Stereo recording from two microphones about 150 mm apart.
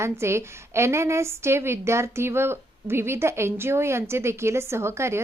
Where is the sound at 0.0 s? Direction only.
20° right (ahead or behind).